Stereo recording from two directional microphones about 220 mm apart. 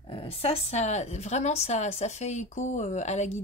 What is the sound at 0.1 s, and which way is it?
A woman's voice, 25° left (ahead or behind).